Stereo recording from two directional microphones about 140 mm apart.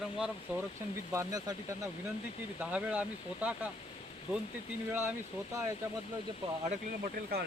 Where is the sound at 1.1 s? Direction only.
25° right (ahead or behind).